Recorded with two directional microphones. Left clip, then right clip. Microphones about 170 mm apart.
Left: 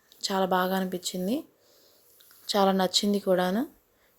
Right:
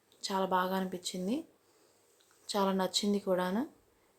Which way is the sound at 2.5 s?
35° left (ahead or behind).